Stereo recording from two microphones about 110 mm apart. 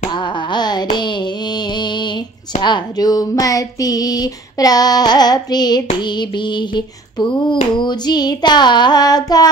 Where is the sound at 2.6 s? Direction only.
40° left (ahead or behind).